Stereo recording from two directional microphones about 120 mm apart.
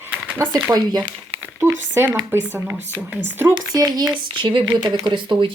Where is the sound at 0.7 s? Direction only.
20° right (ahead or behind).